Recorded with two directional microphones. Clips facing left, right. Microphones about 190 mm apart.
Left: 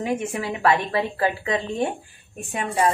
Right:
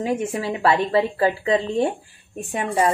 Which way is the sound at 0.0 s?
30° right (ahead or behind).